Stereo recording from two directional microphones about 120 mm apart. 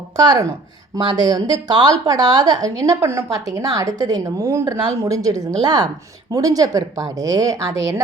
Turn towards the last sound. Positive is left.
turn(degrees=-25)  # may be behind; listen again after turning